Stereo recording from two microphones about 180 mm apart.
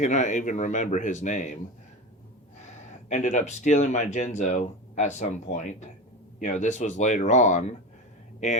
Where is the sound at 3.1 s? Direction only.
40° left (ahead or behind).